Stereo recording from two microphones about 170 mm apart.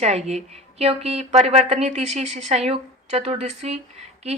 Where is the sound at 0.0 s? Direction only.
40° right (ahead or behind).